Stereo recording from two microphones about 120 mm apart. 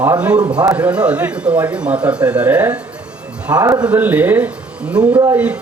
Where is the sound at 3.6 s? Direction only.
25° right (ahead or behind).